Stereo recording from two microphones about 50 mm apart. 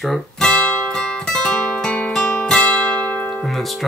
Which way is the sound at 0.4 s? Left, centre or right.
Centre.